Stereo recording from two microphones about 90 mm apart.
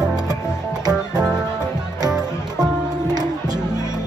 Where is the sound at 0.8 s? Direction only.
45° right (ahead or behind).